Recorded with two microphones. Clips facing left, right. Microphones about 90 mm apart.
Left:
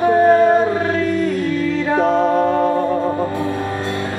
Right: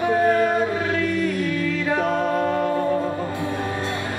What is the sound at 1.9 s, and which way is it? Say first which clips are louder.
Music: left 8 dB; 25° left (ahead or behind).